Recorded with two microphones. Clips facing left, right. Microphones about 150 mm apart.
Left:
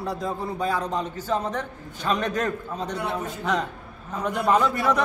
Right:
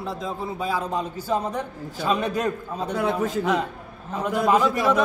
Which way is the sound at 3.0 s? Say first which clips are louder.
Right 6 dB; 90° right.